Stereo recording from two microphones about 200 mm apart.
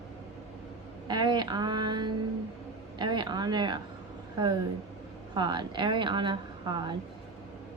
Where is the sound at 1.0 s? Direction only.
20° right (ahead or behind).